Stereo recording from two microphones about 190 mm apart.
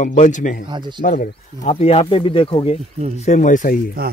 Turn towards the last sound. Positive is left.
turn(degrees=45)  # may be behind; listen again after turning